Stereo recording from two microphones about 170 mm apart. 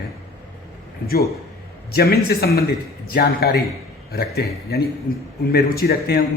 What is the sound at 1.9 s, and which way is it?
Speech, 65° left (ahead or behind).